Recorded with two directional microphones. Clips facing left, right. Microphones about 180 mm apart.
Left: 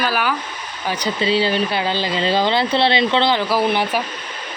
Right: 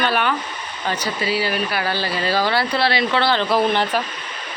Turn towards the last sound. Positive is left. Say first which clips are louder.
# even
turn(degrees=10)  # may be behind; listen again after turning